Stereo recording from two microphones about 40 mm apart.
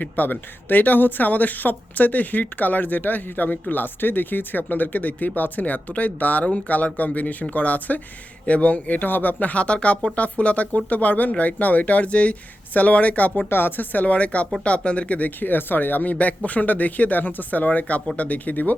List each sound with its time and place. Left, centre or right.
0.0 s speech: left
13.3 s speech: left
13.9 s speech: left
15.4 s speech: left
16.1 s speech: left